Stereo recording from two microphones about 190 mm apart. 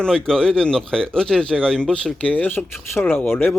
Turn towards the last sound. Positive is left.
turn(degrees=10)  # may be behind; listen again after turning